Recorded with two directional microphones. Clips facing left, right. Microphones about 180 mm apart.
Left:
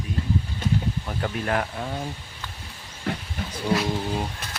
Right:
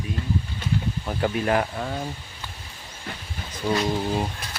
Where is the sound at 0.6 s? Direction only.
45° left (ahead or behind).